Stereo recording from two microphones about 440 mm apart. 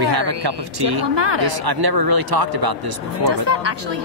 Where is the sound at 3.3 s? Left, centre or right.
Right.